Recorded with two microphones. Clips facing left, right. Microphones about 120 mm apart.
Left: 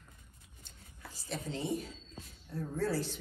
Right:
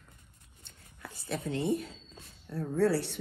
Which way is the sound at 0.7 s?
60° right (ahead or behind).